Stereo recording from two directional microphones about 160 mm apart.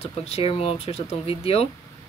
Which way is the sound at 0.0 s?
40° left (ahead or behind).